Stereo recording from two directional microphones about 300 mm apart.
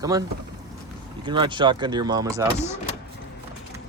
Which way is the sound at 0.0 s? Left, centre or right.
Centre.